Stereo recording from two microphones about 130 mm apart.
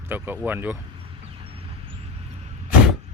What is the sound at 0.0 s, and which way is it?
Speech, 15° right (ahead or behind).